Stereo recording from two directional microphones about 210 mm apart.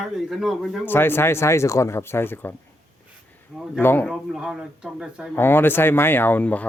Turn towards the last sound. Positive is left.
turn(degrees=5)  # may be behind; listen again after turning